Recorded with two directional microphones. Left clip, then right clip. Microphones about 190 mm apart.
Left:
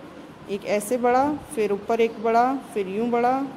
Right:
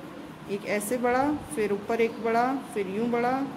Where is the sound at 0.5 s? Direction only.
25° left (ahead or behind).